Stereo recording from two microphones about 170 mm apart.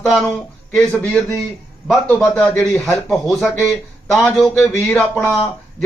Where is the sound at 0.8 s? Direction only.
5° left (ahead or behind).